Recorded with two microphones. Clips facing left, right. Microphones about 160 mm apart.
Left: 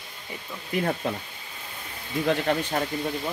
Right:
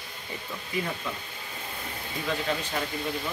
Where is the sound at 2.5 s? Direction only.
60° left (ahead or behind).